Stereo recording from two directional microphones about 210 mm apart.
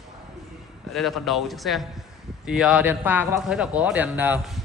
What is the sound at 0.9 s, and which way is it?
Speech, centre (ahead or behind).